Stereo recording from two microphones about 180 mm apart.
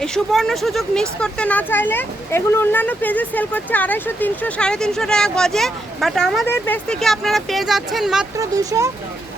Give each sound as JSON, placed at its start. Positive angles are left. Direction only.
{"t": 0.0, "sound": "speech", "side_deg": 0}
{"t": 8.4, "sound": "speech", "side_deg": -20}